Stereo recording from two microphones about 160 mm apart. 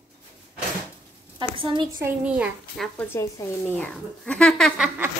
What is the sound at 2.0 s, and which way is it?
Speech, 10° right (ahead or behind).